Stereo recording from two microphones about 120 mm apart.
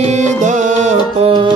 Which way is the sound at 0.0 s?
75° right (ahead or behind).